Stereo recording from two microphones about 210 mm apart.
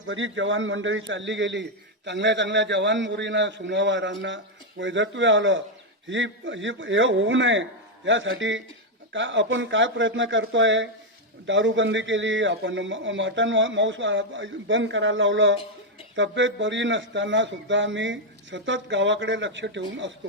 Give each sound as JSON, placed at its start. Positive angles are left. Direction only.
{"t": 0.1, "sound": "a man's voice", "side_deg": -65}